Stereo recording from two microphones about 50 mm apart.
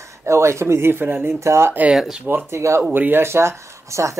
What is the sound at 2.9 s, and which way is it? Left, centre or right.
Speech, right.